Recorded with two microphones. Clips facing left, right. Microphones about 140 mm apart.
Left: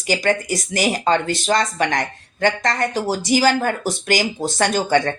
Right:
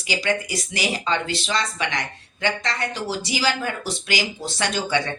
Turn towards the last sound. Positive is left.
turn(degrees=45)  # may be behind; listen again after turning